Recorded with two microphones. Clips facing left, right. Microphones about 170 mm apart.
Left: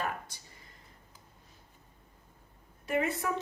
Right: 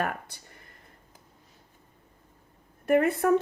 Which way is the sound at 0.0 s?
60° right (ahead or behind).